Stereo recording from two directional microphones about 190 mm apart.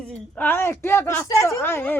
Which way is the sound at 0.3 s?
10° left (ahead or behind).